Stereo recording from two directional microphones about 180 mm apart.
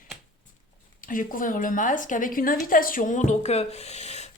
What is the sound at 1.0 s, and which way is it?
A woman's voice, 50° left (ahead or behind).